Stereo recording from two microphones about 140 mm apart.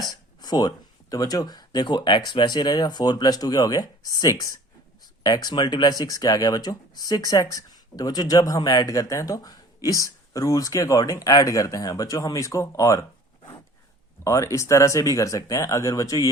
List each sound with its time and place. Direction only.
0.0 s a sound: 30° left (ahead or behind)
1.1 s speech: 25° left (ahead or behind)
14.3 s speech: 25° left (ahead or behind)